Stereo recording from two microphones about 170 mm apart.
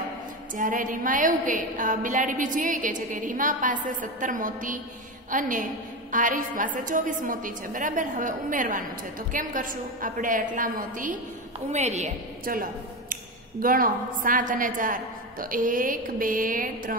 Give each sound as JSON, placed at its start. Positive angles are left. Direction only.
{"t": 0.6, "sound": "a woman's voice", "side_deg": -50}
{"t": 13.1, "sound": "a woman's voice", "side_deg": -55}